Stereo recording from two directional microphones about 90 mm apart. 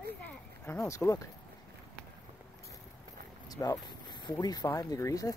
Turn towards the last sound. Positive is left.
turn(degrees=35)  # may be behind; listen again after turning